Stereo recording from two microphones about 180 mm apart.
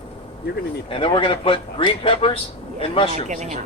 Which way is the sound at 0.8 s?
30° left (ahead or behind).